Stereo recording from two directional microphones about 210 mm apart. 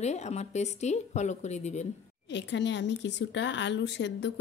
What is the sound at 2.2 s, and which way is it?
Speech, 55° left (ahead or behind).